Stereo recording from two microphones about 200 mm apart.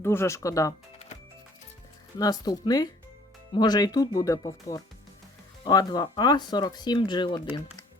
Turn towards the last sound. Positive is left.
turn(degrees=20)  # may be behind; listen again after turning